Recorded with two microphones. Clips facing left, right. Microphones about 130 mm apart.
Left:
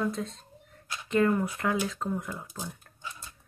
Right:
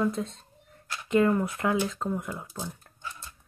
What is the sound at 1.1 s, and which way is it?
Speech, 25° right (ahead or behind).